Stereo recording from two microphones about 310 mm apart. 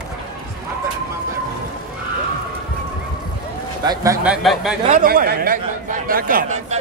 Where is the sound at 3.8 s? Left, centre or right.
Centre.